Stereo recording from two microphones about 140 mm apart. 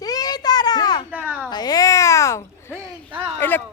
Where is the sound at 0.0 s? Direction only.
25° left (ahead or behind).